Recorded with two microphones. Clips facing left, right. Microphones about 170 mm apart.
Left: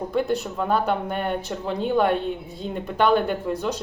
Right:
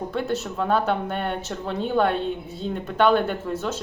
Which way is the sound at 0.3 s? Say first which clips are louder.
Even; centre (ahead or behind).